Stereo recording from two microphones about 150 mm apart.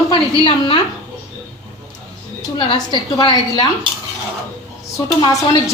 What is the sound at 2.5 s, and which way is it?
A woman's voice, 35° left (ahead or behind).